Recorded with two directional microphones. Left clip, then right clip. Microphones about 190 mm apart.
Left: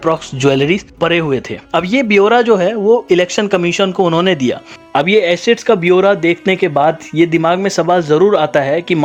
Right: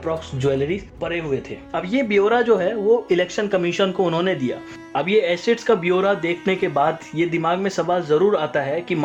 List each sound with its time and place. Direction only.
0.0 s speech: 55° left (ahead or behind)
1.8 s speech: 40° left (ahead or behind)